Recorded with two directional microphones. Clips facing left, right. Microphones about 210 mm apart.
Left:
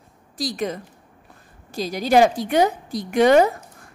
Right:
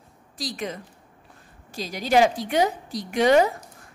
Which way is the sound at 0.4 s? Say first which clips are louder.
Left 5 dB; 40° left (ahead or behind).